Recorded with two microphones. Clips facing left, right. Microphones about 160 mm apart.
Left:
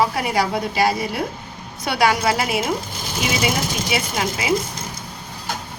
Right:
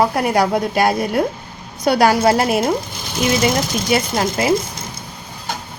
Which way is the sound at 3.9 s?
45° right (ahead or behind).